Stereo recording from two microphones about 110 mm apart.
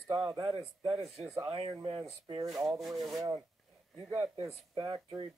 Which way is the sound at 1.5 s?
50° right (ahead or behind).